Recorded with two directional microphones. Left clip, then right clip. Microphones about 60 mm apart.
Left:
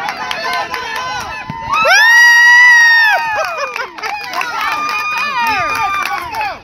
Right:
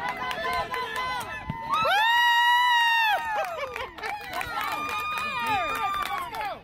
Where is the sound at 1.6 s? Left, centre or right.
Right.